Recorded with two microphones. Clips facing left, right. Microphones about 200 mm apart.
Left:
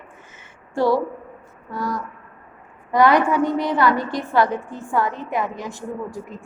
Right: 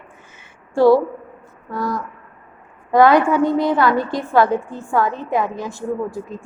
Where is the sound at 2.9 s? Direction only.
15° left (ahead or behind).